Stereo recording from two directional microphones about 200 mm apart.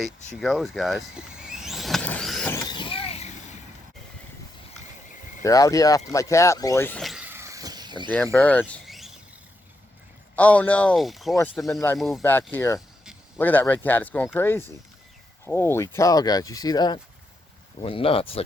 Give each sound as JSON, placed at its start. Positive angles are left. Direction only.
{"t": 0.3, "sound": "vehicle", "side_deg": 0}
{"t": 2.5, "sound": "vehicle", "side_deg": 20}
{"t": 5.4, "sound": "speech", "side_deg": 15}
{"t": 7.0, "sound": "a sound", "side_deg": -5}
{"t": 8.1, "sound": "speech", "side_deg": 5}
{"t": 10.3, "sound": "speech", "side_deg": 5}
{"t": 11.9, "sound": "speech", "side_deg": 0}